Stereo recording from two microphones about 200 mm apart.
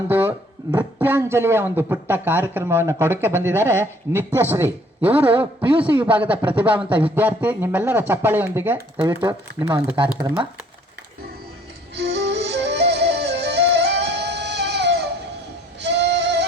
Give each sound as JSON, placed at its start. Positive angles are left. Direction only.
{"t": 0.1, "sound": "a sound", "side_deg": -10}
{"t": 0.8, "sound": "a man's voice", "side_deg": -10}
{"t": 9.2, "sound": "speech", "side_deg": -20}
{"t": 10.1, "sound": "a man's voice", "side_deg": -10}
{"t": 12.1, "sound": "music", "side_deg": -65}
{"t": 15.8, "sound": "a sound", "side_deg": -60}